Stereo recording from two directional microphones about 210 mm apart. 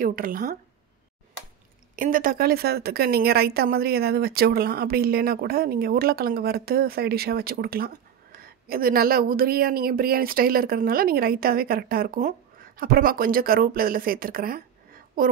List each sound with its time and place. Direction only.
0.0 s speech: 40° right (ahead or behind)
2.0 s speech: 40° right (ahead or behind)